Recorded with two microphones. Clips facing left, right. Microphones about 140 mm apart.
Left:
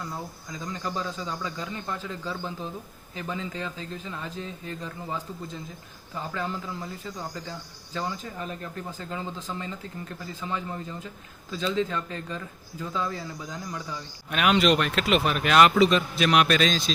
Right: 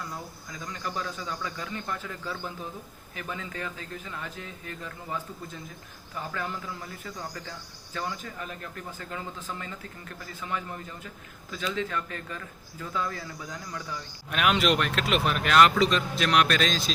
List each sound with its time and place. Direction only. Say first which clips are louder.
0.6 s speech: left 2 dB; 25° left (ahead or behind)
14.3 s speech: left 3 dB; centre (ahead or behind)